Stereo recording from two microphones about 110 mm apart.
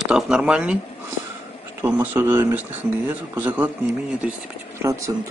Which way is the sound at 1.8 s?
20° right (ahead or behind).